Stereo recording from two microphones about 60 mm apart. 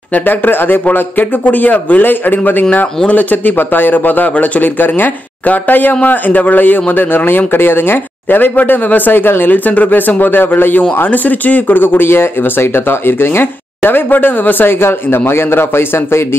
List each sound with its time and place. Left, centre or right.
0.1 s speech: left